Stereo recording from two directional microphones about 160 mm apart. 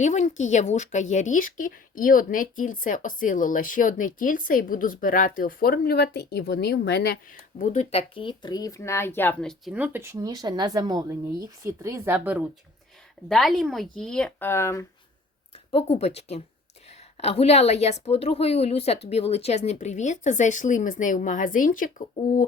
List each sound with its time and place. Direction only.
0.0 s speech: 50° left (ahead or behind); by 7.3 s 85° left
7.6 s speech: 45° left (ahead or behind); by 9.7 s 5° left (ahead or behind)
9.7 s speech: 10° right (ahead or behind)
13.2 s speech: centre (ahead or behind); by 14.8 s 15° left (ahead or behind)
15.5 s a woman's voice: 40° left (ahead or behind); by 22.4 s 55° left (ahead or behind)